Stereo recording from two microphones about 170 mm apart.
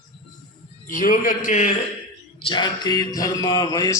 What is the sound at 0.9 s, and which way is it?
Speech, 55° left (ahead or behind).